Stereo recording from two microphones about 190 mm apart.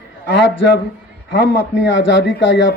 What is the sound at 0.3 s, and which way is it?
Speech, 70° left (ahead or behind).